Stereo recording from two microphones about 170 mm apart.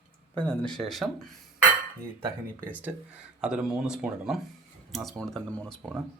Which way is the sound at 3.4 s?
5° right (ahead or behind).